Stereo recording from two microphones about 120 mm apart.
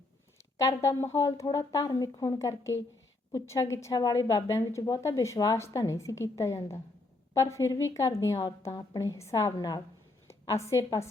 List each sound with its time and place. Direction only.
0.6 s a woman's voice: 25° left (ahead or behind)